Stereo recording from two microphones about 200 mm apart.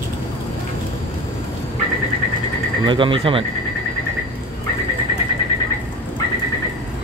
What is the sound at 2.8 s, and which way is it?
Speech, 25° right (ahead or behind).